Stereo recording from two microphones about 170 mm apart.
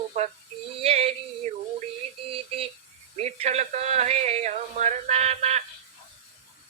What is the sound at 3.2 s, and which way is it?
Speech, 40° right (ahead or behind).